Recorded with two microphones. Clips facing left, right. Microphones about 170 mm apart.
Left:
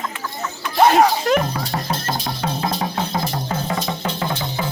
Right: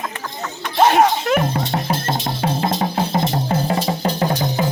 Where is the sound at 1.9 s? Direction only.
25° right (ahead or behind).